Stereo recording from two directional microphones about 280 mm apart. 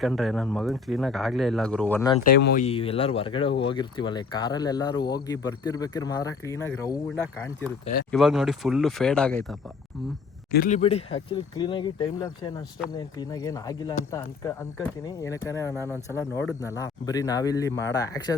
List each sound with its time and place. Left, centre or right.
0.0 s speech: centre
2.1 s speech: left
2.6 s speech: left
8.1 s speech: centre
10.5 s speech: left; by 15.7 s centre
15.7 s speech: centre
16.1 s speech: centre